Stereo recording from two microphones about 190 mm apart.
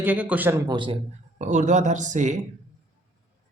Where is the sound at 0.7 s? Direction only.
25° right (ahead or behind).